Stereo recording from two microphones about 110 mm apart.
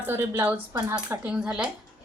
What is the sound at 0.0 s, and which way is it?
A woman's voice, 20° right (ahead or behind).